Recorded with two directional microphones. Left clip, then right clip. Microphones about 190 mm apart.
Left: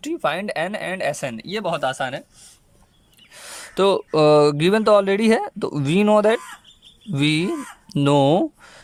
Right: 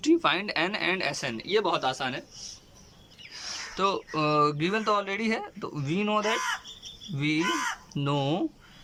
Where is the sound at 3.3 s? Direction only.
50° left (ahead or behind).